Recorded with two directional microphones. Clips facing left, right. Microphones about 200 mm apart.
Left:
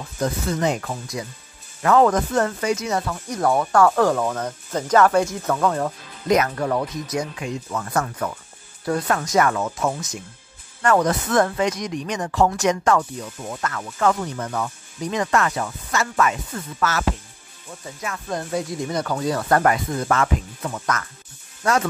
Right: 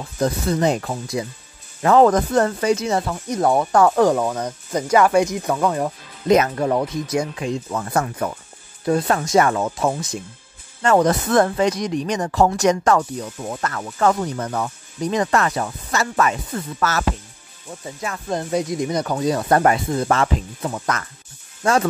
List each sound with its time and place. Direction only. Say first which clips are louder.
0.2 s speech: right 3 dB; 35° right (ahead or behind); by 5.9 s 10° right (ahead or behind)
6.2 s speech: right 3 dB; 25° right (ahead or behind)
11.1 s speech: right 3 dB; 35° right (ahead or behind)
18.0 s speech: right 3 dB; 30° right (ahead or behind)
18.4 s speech: right 5 dB; 20° right (ahead or behind)